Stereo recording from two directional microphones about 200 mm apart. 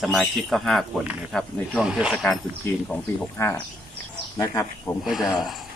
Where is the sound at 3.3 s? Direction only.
10° left (ahead or behind).